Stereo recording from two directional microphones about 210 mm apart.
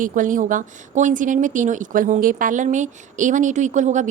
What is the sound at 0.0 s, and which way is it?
A woman's voice, 40° right (ahead or behind).